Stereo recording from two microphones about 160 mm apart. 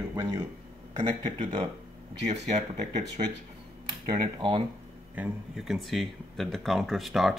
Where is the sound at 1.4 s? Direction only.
35° right (ahead or behind).